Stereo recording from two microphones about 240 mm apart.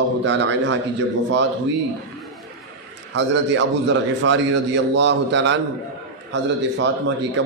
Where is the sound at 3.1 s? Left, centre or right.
Right.